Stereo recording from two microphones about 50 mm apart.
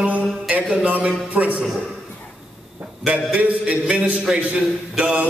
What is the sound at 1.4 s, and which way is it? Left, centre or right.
Speech, right.